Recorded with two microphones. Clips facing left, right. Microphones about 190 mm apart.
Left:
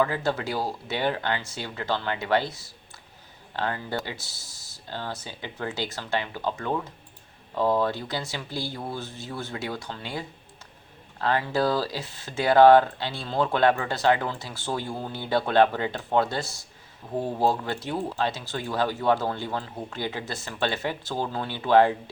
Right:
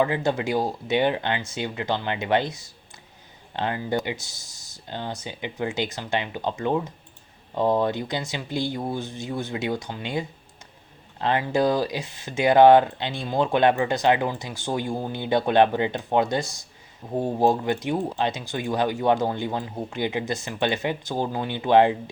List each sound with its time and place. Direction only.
0.0 s speech: 20° right (ahead or behind)